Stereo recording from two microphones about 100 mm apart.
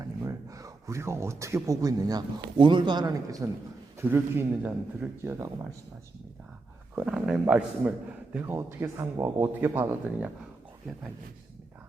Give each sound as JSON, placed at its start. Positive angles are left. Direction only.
{"t": 0.0, "sound": "speech", "side_deg": -35}
{"t": 4.0, "sound": "speech", "side_deg": -20}
{"t": 6.9, "sound": "a man's voice", "side_deg": -10}
{"t": 8.5, "sound": "speech", "side_deg": -30}